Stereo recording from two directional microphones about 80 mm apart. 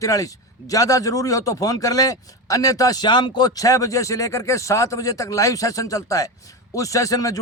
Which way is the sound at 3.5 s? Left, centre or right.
Left.